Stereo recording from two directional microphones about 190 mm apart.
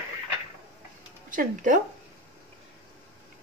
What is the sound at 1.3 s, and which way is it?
Speech, 40° right (ahead or behind).